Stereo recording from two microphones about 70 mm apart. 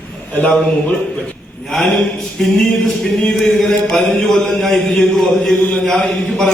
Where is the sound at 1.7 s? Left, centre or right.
Centre.